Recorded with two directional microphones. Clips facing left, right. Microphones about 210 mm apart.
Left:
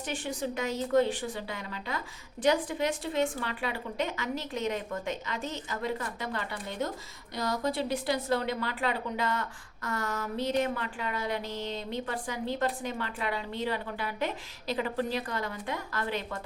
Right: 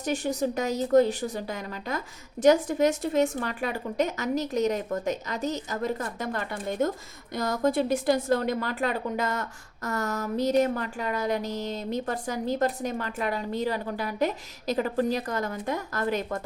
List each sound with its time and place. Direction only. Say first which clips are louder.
0.0 s a woman's voice: right 7 dB; 40° right (ahead or behind)